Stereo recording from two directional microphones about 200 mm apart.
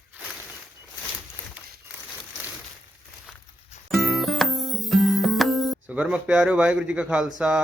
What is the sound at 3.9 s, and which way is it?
Music, centre (ahead or behind).